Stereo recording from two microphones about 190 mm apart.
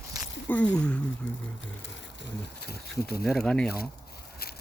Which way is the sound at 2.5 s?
55° left (ahead or behind).